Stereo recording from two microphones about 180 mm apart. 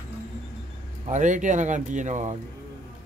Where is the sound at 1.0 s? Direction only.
45° right (ahead or behind).